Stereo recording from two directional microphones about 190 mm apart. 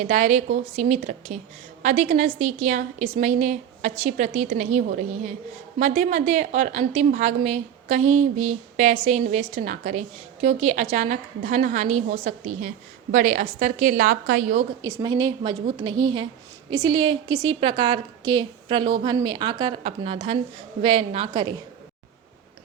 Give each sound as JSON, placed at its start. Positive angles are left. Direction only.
{"t": 0.0, "sound": "a woman's voice", "side_deg": -40}
{"t": 14.8, "sound": "a woman's voice", "side_deg": -20}